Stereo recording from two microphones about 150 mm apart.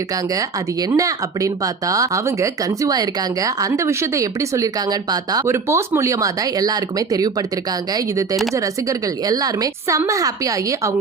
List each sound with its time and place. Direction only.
0.3 s speech: 20° right (ahead or behind)